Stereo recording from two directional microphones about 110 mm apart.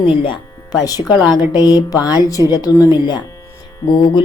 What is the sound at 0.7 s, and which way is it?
Speech, 35° left (ahead or behind).